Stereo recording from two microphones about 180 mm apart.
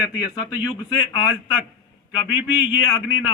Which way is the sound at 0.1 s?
25° left (ahead or behind).